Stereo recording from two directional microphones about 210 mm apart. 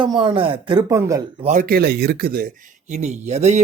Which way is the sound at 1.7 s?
50° right (ahead or behind).